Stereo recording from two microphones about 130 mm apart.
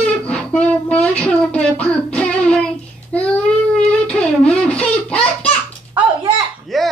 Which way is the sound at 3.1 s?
10° left (ahead or behind).